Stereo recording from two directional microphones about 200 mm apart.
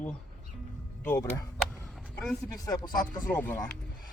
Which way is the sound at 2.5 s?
15° left (ahead or behind).